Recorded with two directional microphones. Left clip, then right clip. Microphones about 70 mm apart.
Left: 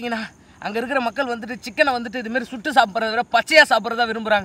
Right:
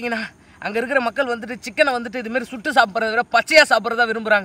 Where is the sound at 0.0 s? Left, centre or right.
Centre.